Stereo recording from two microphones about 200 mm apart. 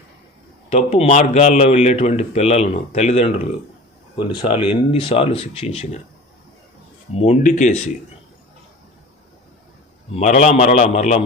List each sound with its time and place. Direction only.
0.7 s speech: 30° left (ahead or behind)
4.4 s speech: 25° left (ahead or behind)
7.2 s speech: 35° left (ahead or behind)
10.2 s speech: 40° left (ahead or behind)